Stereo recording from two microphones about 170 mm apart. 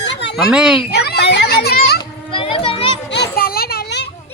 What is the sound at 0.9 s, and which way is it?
Children playing, 75° left (ahead or behind).